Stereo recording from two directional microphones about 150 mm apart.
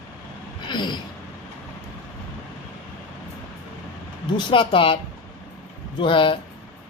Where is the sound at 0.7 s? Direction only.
30° left (ahead or behind).